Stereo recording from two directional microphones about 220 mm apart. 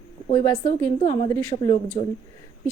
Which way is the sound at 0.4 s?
10° left (ahead or behind).